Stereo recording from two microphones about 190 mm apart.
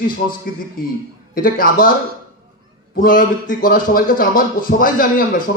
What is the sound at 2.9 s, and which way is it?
A man's voice, 45° left (ahead or behind).